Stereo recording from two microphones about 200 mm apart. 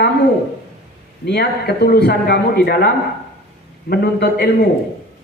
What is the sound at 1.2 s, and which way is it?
Speech, 55° left (ahead or behind).